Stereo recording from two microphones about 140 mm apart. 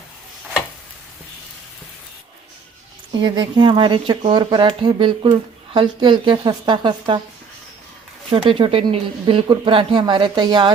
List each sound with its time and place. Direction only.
3.1 s speech: 35° right (ahead or behind)
8.3 s speech: 40° right (ahead or behind)